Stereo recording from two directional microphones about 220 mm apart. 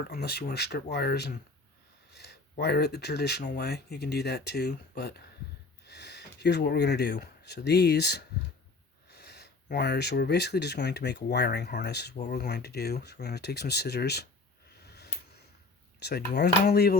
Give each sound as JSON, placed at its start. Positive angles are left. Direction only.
{"t": 0.1, "sound": "speech", "side_deg": 45}
{"t": 14.8, "sound": "a sound", "side_deg": 45}
{"t": 16.0, "sound": "speech", "side_deg": 50}